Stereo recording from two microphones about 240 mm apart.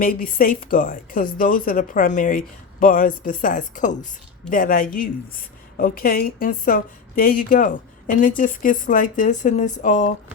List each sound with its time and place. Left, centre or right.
0.0 s a woman's voice: left